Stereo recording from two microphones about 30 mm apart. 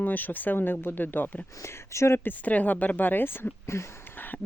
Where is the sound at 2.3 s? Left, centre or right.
Left.